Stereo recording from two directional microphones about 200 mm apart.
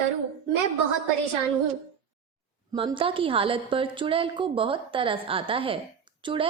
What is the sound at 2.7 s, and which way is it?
A woman's voice, 25° right (ahead or behind).